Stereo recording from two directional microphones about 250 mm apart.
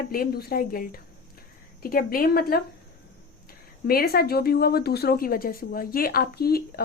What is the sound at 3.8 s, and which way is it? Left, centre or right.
A woman's voice, left.